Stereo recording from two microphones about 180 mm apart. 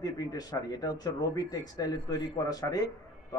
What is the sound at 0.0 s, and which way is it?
A man's voice, 20° left (ahead or behind).